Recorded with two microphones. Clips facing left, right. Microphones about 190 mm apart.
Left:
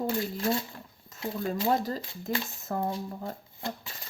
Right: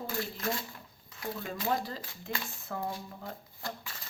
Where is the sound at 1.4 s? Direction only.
40° left (ahead or behind).